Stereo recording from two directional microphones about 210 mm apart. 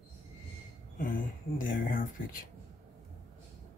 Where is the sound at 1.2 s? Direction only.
40° left (ahead or behind).